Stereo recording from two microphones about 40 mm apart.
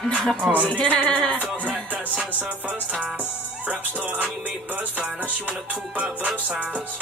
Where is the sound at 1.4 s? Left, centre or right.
Right.